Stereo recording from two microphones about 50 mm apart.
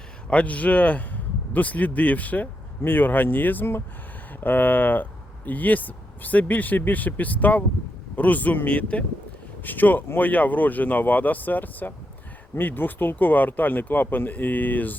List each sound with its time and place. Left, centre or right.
0.3 s speech: left
9.6 s speech: left